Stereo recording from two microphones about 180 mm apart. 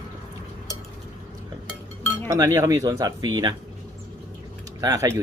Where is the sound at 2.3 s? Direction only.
20° right (ahead or behind).